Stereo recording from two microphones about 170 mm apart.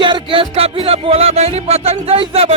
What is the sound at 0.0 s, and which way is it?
Music, 30° right (ahead or behind).